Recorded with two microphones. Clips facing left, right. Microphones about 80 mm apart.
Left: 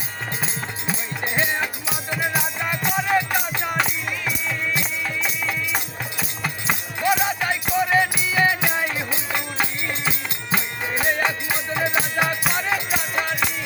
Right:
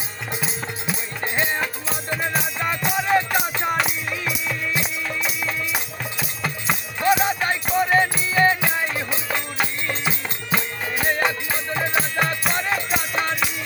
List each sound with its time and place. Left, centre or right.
1.2 s music: centre
10.1 s music: left; by 13.5 s centre